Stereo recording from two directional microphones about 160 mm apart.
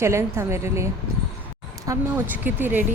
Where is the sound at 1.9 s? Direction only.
10° right (ahead or behind).